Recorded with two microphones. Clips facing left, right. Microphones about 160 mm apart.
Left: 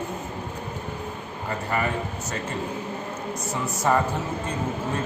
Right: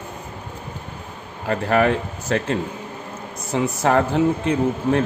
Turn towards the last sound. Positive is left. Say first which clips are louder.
# right 9 dB
turn(degrees=-75)  # may be behind; listen again after turning